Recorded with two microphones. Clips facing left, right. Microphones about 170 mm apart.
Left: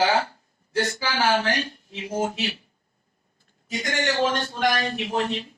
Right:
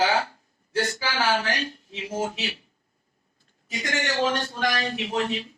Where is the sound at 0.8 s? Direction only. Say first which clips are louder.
Left 2 dB; 50° left (ahead or behind).